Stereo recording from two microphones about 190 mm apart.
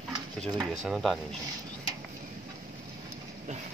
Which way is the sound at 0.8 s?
Centre (ahead or behind).